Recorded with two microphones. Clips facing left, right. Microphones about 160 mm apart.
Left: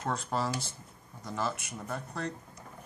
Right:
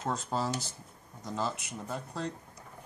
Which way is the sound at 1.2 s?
20° right (ahead or behind).